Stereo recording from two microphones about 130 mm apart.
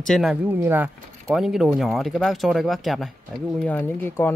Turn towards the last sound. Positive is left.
turn(degrees=15)  # may be behind; listen again after turning